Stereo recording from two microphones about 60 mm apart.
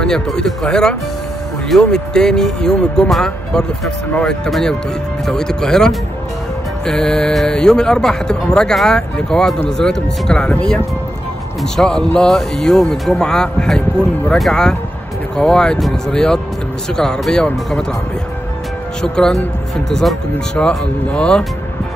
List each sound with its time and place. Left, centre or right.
0.0 s speech: centre
11.6 s speech: centre
19.1 s speech: centre
20.5 s speech: centre